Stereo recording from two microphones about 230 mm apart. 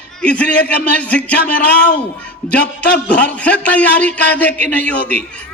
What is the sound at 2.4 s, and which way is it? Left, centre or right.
A man's voice, centre.